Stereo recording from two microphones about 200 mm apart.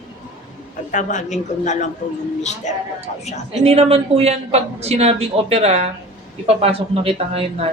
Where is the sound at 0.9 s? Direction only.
40° left (ahead or behind).